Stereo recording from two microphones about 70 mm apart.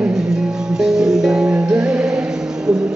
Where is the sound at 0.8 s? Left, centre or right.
Centre.